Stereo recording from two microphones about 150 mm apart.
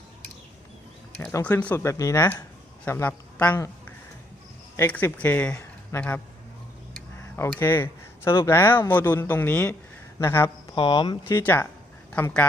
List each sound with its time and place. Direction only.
1.2 s speech: 15° left (ahead or behind)
4.8 s speech: 15° left (ahead or behind)
7.3 s speech: 15° left (ahead or behind)
10.8 s speech: 35° left (ahead or behind)
11.3 s speech: 15° left (ahead or behind)